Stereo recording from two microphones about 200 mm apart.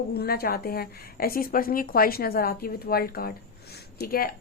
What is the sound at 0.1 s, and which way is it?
A woman's voice, 50° left (ahead or behind).